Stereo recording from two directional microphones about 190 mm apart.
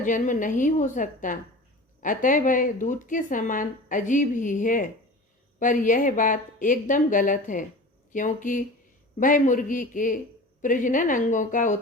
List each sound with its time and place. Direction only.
0.0 s a woman's voice: 45° left (ahead or behind)